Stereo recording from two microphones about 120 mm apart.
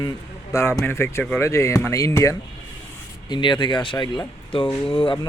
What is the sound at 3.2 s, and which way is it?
Speech, 40° left (ahead or behind).